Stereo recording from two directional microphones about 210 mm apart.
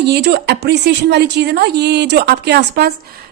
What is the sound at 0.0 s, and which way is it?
A woman's voice, 55° right (ahead or behind).